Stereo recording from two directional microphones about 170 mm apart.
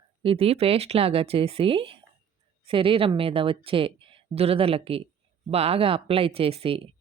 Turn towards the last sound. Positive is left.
turn(degrees=-35)  # may be behind; listen again after turning